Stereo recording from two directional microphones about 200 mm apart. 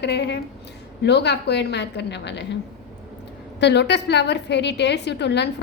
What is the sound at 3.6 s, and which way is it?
A woman's voice, 60° left (ahead or behind).